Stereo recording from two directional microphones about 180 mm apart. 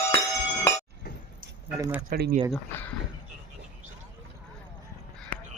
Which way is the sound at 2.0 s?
60° right (ahead or behind).